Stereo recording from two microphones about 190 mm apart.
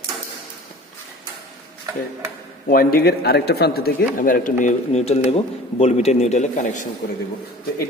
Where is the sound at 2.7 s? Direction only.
50° left (ahead or behind).